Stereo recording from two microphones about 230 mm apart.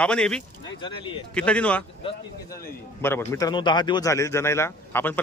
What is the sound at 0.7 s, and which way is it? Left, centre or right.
Speech, left.